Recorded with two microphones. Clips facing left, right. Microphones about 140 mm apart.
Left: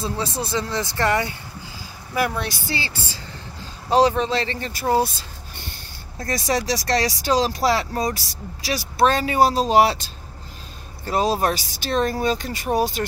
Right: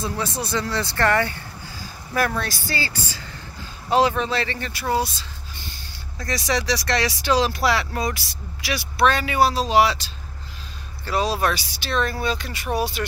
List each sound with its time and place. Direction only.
0.0 s speech: 25° left (ahead or behind); by 5.1 s 45° left (ahead or behind)
6.2 s speech: 45° left (ahead or behind)